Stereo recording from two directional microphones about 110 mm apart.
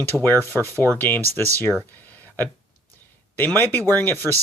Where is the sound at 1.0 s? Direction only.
15° left (ahead or behind).